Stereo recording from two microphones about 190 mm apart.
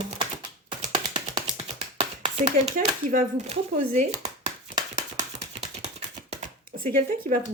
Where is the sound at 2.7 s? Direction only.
45° right (ahead or behind).